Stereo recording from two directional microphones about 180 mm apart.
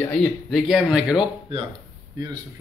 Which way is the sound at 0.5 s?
5° right (ahead or behind).